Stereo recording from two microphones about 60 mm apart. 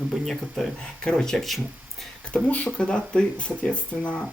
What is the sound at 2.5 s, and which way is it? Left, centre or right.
Speech, left.